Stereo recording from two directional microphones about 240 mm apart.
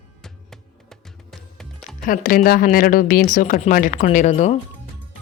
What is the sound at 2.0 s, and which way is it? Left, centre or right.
Speech, left.